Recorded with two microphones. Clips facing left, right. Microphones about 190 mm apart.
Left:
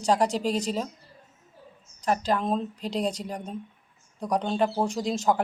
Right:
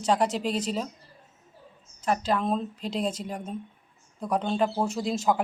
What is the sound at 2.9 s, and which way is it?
Speech, 35° left (ahead or behind).